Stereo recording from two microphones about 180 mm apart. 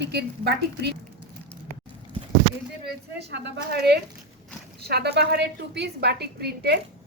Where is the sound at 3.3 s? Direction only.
65° right (ahead or behind).